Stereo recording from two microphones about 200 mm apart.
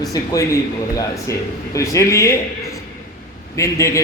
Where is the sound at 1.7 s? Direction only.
15° left (ahead or behind).